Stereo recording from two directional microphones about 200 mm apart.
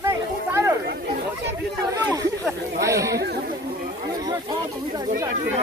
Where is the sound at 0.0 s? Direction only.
15° right (ahead or behind).